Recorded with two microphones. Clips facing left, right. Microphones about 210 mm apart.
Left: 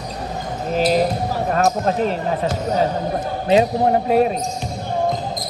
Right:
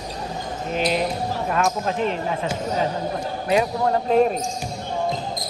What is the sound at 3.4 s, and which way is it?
Speech, 20° left (ahead or behind).